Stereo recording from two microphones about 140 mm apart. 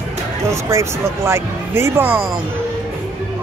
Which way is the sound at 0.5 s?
20° right (ahead or behind).